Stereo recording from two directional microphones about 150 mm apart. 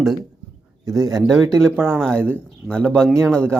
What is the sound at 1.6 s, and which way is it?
Speech, 15° right (ahead or behind).